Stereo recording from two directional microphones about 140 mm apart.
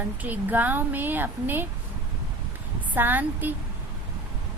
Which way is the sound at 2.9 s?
15° right (ahead or behind).